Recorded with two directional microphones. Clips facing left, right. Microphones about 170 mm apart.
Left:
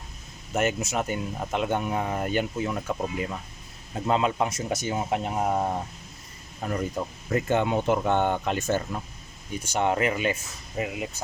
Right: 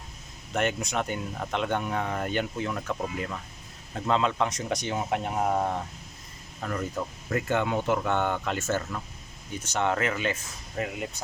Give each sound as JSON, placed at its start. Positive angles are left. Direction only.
{"t": 0.5, "sound": "speech", "side_deg": 5}
{"t": 6.6, "sound": "speech", "side_deg": 15}